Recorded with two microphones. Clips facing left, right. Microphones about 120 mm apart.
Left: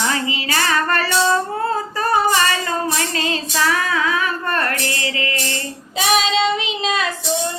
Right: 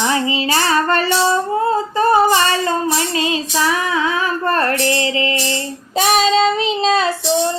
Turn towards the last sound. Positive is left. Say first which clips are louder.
# right 5 dB
turn(degrees=-35)  # may be behind; listen again after turning